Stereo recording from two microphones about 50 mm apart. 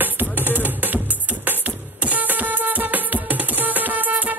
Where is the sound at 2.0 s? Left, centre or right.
Right.